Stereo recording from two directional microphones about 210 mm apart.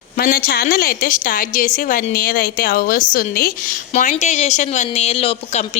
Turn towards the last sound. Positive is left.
turn(degrees=30)  # may be behind; listen again after turning